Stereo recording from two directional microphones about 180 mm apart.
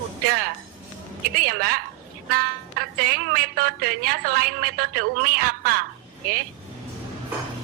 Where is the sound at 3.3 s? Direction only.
55° right (ahead or behind).